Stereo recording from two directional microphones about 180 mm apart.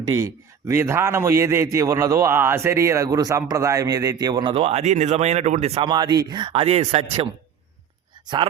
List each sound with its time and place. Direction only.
0.0 s a man's voice: 20° right (ahead or behind)